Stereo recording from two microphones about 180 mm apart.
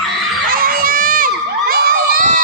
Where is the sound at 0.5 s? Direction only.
55° right (ahead or behind).